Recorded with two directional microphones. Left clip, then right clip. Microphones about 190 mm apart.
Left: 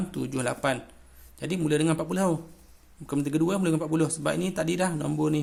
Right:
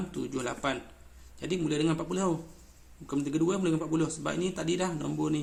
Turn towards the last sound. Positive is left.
turn(degrees=40)  # may be behind; listen again after turning